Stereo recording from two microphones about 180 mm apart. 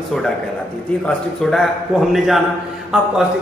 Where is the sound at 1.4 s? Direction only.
Centre (ahead or behind).